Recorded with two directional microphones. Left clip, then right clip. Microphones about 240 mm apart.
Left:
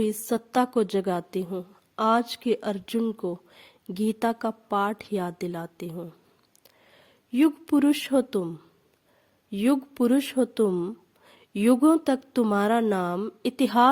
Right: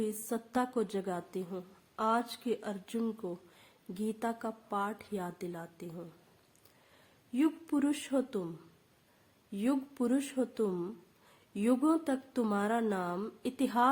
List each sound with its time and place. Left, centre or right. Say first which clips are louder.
0.0 s a woman's voice: left 10 dB; left
7.3 s a woman's voice: left 9 dB; left
9.5 s a woman's voice: left 9 dB; left